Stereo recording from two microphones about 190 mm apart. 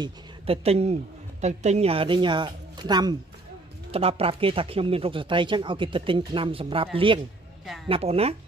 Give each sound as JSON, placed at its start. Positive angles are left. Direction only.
{"t": 0.0, "sound": "speech", "side_deg": -30}
{"t": 7.6, "sound": "speech", "side_deg": 0}
{"t": 7.9, "sound": "speech", "side_deg": -30}